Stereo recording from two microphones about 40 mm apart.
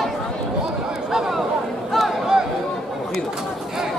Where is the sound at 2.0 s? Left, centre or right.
Centre.